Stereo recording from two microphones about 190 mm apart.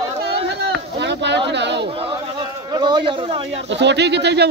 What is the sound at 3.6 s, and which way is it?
Speech, 65° right (ahead or behind).